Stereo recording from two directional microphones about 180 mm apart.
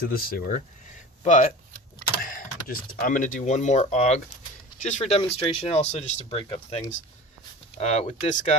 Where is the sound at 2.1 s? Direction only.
50° left (ahead or behind).